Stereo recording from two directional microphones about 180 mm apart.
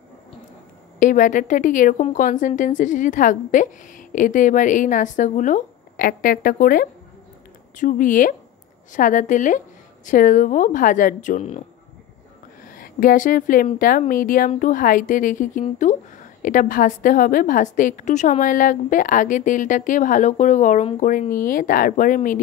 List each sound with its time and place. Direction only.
0.9 s a woman's voice: 45° left (ahead or behind)
12.7 s a woman's voice: 50° left (ahead or behind)